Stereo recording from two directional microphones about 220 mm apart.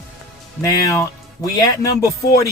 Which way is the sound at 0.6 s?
15° left (ahead or behind).